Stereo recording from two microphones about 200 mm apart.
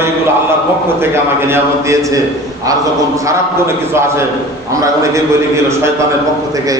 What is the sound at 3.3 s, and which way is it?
A man's voice, 15° right (ahead or behind).